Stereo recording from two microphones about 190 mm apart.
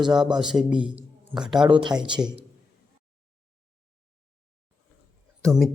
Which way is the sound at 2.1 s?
5° right (ahead or behind).